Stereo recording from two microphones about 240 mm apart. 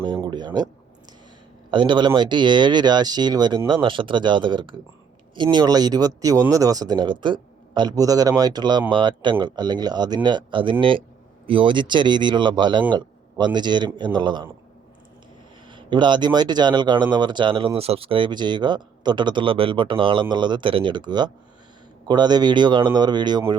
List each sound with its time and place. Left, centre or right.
0.0 s a sound: centre
1.7 s speech: centre
15.7 s speech: centre